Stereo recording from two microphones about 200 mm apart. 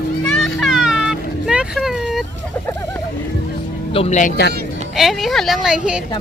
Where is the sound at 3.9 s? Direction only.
30° left (ahead or behind).